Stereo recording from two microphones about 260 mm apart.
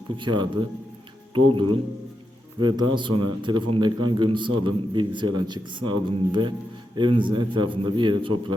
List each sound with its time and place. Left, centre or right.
0.2 s a man's voice: centre